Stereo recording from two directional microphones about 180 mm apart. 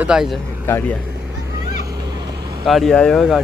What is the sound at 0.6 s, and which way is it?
Speech, 10° left (ahead or behind).